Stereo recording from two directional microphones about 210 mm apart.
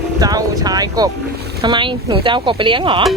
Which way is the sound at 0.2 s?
20° right (ahead or behind).